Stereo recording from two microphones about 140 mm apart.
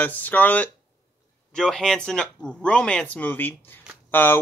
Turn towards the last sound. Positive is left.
turn(degrees=15)  # may be behind; listen again after turning